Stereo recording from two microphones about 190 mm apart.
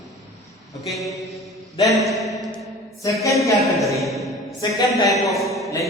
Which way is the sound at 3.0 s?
15° left (ahead or behind).